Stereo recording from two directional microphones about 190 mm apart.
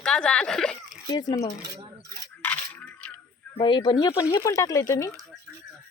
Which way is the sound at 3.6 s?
25° left (ahead or behind).